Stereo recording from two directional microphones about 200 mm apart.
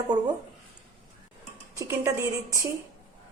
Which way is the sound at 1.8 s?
15° right (ahead or behind).